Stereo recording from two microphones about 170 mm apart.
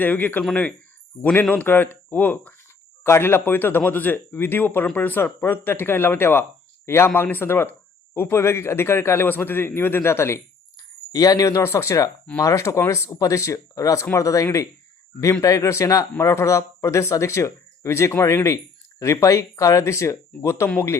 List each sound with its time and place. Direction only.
0.0 s a man's voice: 10° left (ahead or behind)